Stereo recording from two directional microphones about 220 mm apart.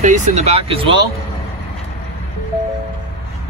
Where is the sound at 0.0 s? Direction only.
35° right (ahead or behind).